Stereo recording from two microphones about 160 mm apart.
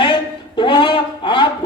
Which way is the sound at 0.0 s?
30° left (ahead or behind).